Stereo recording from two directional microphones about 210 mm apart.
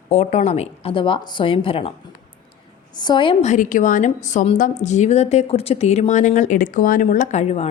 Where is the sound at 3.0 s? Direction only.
20° left (ahead or behind).